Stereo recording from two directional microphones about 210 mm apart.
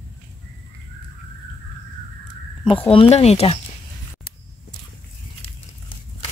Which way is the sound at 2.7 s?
25° left (ahead or behind).